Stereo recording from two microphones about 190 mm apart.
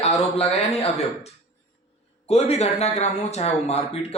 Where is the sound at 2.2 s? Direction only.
35° left (ahead or behind).